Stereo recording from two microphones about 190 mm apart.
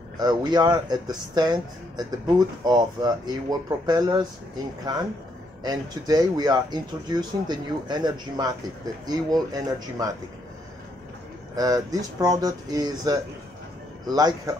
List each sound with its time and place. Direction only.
0.2 s speech: 20° right (ahead or behind)
5.6 s speech: 20° right (ahead or behind)
11.5 s speech: 20° right (ahead or behind)